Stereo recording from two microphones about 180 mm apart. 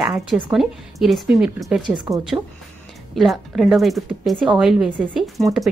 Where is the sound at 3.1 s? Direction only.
Centre (ahead or behind).